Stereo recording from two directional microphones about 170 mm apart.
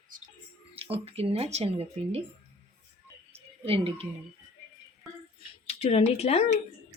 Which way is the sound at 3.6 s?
35° right (ahead or behind).